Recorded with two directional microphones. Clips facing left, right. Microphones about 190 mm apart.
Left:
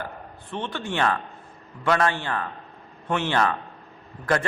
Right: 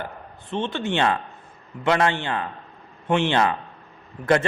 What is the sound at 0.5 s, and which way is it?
A man's voice, 25° right (ahead or behind).